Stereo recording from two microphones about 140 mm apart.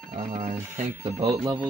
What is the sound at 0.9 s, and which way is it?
Speech, 20° right (ahead or behind).